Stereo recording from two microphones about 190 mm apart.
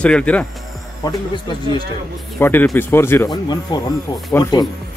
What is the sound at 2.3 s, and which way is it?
A man's voice, 10° left (ahead or behind).